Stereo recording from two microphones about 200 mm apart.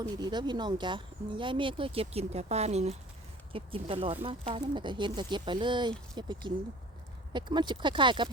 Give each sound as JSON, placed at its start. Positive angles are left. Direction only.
{"t": 0.0, "sound": "speech", "side_deg": -20}